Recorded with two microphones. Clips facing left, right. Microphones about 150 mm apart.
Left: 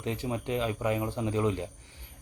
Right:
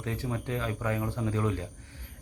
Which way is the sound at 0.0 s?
20° left (ahead or behind).